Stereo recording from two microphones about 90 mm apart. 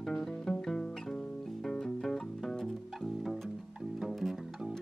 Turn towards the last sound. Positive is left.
turn(degrees=0)  # may be behind; listen again after turning